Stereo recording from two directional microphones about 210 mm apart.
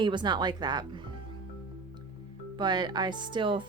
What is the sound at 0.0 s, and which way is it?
A woman's voice, 20° right (ahead or behind).